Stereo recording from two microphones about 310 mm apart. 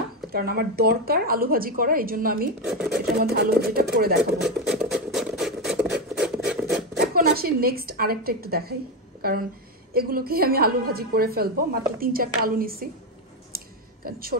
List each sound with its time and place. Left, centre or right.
0.3 s a woman's voice: right
2.6 s speech: centre
3.2 s a woman's voice: right
4.4 s a sound: centre
7.0 s a woman's voice: right
9.9 s a woman's voice: right